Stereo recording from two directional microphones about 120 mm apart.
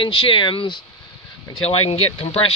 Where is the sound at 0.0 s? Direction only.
45° left (ahead or behind).